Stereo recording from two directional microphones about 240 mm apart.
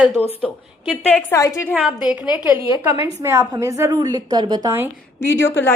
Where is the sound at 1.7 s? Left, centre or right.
Centre.